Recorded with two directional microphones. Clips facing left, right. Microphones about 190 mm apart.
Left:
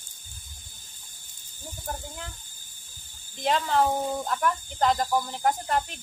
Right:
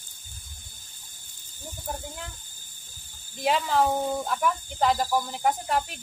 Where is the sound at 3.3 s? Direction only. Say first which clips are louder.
Even; 5° right (ahead or behind).